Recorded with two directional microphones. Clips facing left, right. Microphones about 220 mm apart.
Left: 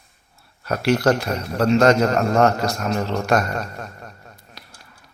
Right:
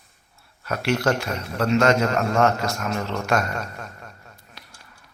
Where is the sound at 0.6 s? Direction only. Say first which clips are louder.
Left 4 dB; 35° left (ahead or behind).